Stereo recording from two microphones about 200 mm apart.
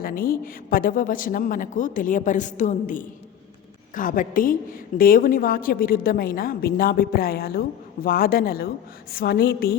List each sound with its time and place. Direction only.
0.0 s a woman's voice: 45° left (ahead or behind)